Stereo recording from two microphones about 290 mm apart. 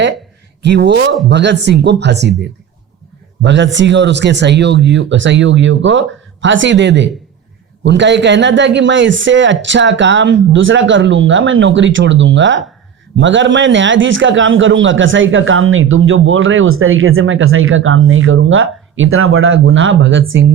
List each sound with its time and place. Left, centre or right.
0.6 s speech: right
3.4 s a man's voice: right